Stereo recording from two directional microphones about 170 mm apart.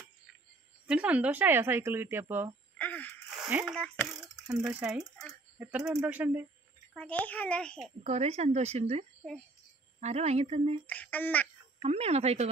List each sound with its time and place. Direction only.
0.8 s speech: 10° right (ahead or behind)
2.8 s gasp: 10° left (ahead or behind)
3.3 s speech: 5° right (ahead or behind)
4.6 s speech: 5° right (ahead or behind)
7.0 s a child's voice: 10° left (ahead or behind)
8.0 s speech: 40° right (ahead or behind)
10.9 s a child's voice: 10° left (ahead or behind)
11.8 s speech: 40° right (ahead or behind)